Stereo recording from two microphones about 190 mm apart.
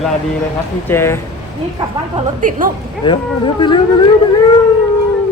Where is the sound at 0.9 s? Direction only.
15° left (ahead or behind).